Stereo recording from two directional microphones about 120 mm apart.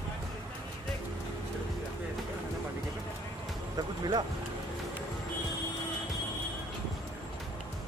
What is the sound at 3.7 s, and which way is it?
Music, 35° right (ahead or behind).